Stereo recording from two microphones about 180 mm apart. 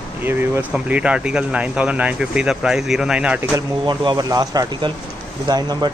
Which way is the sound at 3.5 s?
25° right (ahead or behind).